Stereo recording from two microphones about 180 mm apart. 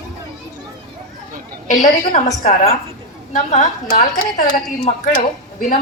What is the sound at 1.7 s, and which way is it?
Speech, 45° left (ahead or behind).